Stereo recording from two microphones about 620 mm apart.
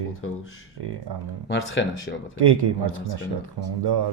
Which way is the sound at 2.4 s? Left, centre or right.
Right.